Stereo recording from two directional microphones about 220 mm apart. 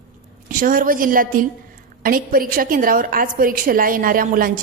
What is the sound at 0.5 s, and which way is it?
A woman's voice, 40° right (ahead or behind).